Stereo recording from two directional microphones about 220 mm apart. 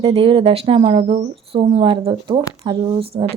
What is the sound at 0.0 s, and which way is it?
A woman's voice, 25° right (ahead or behind).